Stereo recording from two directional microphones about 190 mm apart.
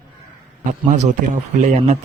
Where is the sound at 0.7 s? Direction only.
40° right (ahead or behind).